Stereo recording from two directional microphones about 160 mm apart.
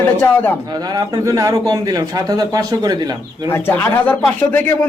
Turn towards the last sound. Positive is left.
turn(degrees=10)  # may be behind; listen again after turning